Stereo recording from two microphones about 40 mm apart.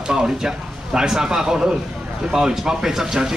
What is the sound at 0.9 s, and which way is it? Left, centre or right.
Speech, centre.